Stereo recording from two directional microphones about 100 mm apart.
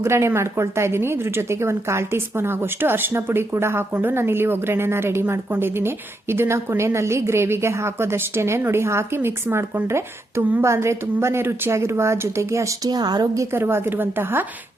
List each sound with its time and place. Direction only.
0.0 s a woman's voice: 25° right (ahead or behind)